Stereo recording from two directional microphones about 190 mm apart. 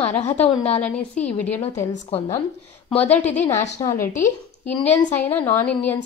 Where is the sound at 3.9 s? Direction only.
45° left (ahead or behind).